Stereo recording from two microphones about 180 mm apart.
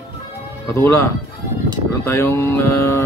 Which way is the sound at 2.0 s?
15° left (ahead or behind).